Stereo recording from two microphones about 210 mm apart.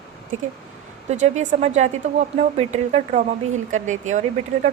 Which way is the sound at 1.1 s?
35° right (ahead or behind).